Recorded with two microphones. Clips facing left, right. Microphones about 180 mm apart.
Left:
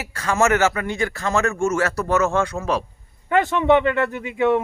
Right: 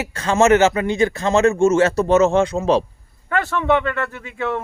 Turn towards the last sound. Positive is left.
turn(degrees=15)  # may be behind; listen again after turning